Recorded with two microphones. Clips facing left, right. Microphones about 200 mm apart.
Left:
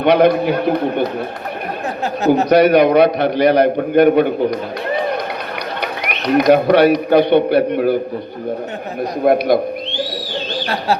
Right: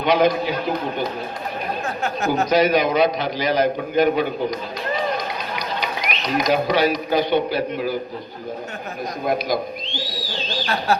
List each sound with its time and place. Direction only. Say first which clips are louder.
0.0 s a man's voice: left 6 dB; 60° left (ahead or behind)
2.4 s a man's voice: left 6 dB; 65° left (ahead or behind)
5.8 s a man's voice: left 4 dB; 60° left (ahead or behind)
9.2 s a man's voice: left 9 dB; 60° left (ahead or behind)